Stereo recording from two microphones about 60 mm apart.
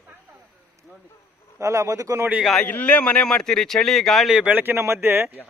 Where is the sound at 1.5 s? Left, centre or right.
Right.